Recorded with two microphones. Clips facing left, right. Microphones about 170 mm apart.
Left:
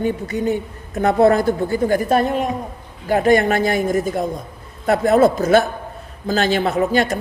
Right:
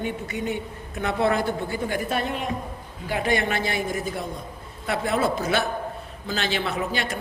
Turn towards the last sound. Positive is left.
turn(degrees=45)  # may be behind; listen again after turning